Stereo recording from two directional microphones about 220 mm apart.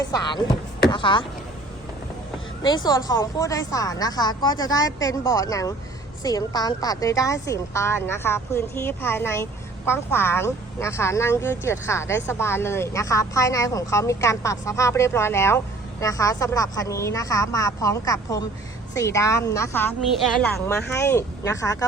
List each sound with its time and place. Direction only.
0.0 s speech: 20° left (ahead or behind)
2.6 s a woman's voice: 20° left (ahead or behind)